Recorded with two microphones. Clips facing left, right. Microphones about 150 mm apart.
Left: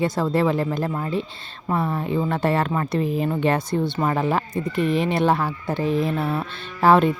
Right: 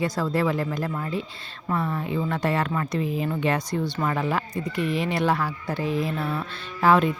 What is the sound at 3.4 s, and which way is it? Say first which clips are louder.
Speech: left 4 dB; 30° left (ahead or behind).